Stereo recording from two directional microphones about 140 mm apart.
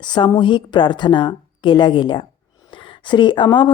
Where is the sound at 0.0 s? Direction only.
30° left (ahead or behind).